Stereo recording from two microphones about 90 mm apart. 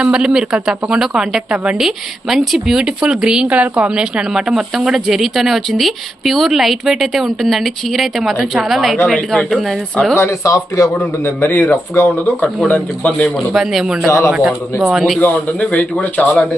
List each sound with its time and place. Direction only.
0.0 s a woman's voice: 10° right (ahead or behind)
10.2 s a man's voice: 35° left (ahead or behind); by 13.3 s 15° left (ahead or behind)
13.5 s speech: 5° right (ahead or behind)
15.2 s a man's voice: 15° left (ahead or behind)